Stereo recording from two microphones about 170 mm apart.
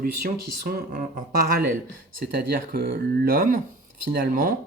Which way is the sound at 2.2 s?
60° right (ahead or behind).